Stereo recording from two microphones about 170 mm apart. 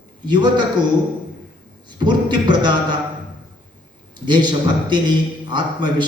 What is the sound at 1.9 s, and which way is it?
Speech, 25° right (ahead or behind).